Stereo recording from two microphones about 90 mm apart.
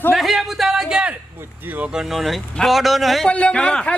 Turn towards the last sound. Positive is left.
turn(degrees=10)  # may be behind; listen again after turning